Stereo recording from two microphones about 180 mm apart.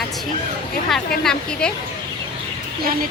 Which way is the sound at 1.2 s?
5° left (ahead or behind).